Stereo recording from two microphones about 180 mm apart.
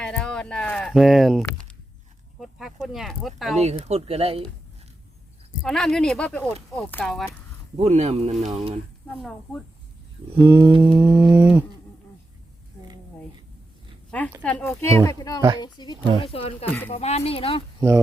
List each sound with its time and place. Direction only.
0.0 s a sound: 5° left (ahead or behind)
2.8 s speech: centre (ahead or behind)
3.6 s speech: 35° right (ahead or behind)
5.6 s speech: centre (ahead or behind)
7.8 s speech: 35° right (ahead or behind)
10.3 s mantra: 10° right (ahead or behind)
10.7 s mantra: 30° right (ahead or behind)
10.9 s mantra: 10° right (ahead or behind)
14.4 s speech: 10° left (ahead or behind); by 17.6 s 30° left (ahead or behind)
17.7 s speech: 20° right (ahead or behind)